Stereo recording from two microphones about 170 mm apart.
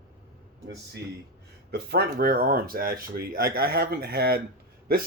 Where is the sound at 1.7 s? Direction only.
70° right (ahead or behind).